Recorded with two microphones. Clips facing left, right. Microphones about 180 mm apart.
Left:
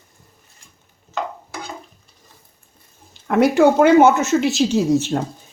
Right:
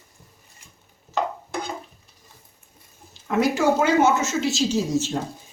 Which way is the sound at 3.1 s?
60° left (ahead or behind).